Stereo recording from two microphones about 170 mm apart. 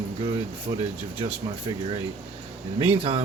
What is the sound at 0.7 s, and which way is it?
Speech, 55° right (ahead or behind).